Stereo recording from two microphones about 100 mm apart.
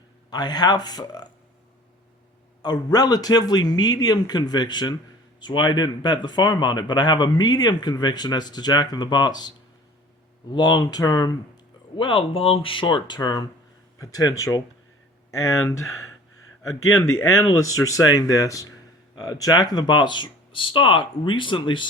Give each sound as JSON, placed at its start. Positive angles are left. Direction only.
{"t": 0.3, "sound": "speech", "side_deg": 45}
{"t": 2.6, "sound": "speech", "side_deg": 45}
{"t": 10.5, "sound": "speech", "side_deg": 45}
{"t": 11.9, "sound": "speech", "side_deg": 60}